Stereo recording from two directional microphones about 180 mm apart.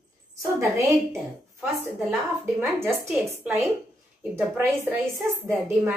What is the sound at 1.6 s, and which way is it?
A woman's voice, 10° right (ahead or behind).